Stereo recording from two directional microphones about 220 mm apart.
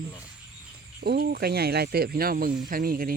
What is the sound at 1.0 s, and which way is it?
Speech, 45° right (ahead or behind).